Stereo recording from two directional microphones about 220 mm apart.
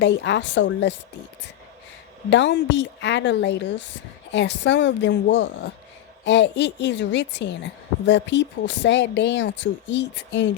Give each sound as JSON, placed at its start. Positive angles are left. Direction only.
{"t": 0.0, "sound": "a woman's voice", "side_deg": 55}
{"t": 2.3, "sound": "a woman's voice", "side_deg": 55}